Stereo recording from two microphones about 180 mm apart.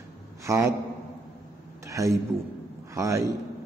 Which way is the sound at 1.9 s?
15° right (ahead or behind).